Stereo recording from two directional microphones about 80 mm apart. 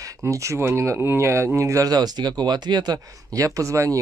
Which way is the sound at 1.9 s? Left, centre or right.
Right.